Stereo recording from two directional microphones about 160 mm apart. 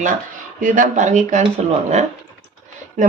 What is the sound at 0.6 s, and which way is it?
Speech, 50° right (ahead or behind).